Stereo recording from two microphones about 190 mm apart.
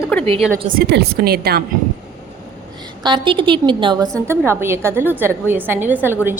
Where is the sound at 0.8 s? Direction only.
55° right (ahead or behind).